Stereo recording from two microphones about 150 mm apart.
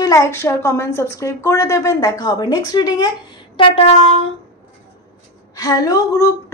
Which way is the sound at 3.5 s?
40° left (ahead or behind).